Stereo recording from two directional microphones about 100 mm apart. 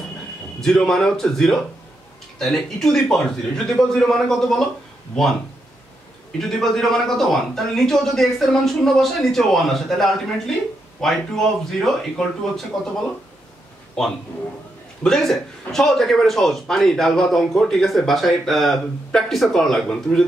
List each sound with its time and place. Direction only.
0.6 s a man's voice: 5° left (ahead or behind)
6.6 s a man's voice: 5° left (ahead or behind)
15.0 s a man's voice: 5° left (ahead or behind)